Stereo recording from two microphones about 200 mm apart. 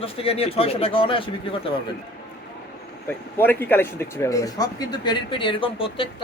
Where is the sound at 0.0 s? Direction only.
30° left (ahead or behind).